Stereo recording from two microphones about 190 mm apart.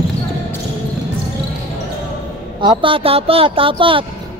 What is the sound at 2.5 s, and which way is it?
A woman's voice, 25° right (ahead or behind).